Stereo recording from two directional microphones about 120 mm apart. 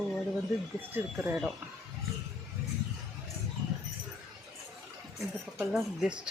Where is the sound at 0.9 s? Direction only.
20° right (ahead or behind).